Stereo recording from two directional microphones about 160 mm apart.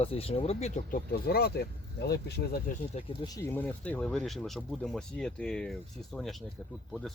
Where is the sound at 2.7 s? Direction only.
60° left (ahead or behind).